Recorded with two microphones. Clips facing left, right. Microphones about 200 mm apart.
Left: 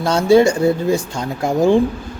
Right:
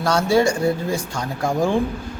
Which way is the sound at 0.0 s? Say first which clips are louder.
Left 5 dB; 25° left (ahead or behind).